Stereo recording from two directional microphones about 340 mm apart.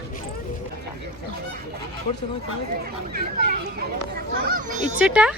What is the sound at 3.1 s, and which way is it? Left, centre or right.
A child's voice, right.